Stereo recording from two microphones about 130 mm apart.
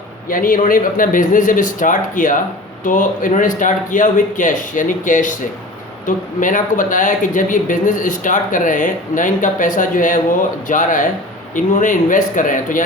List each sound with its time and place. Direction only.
0.3 s speech: 90° left